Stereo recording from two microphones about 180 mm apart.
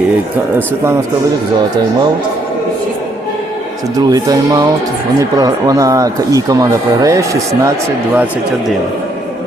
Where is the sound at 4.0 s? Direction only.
20° right (ahead or behind).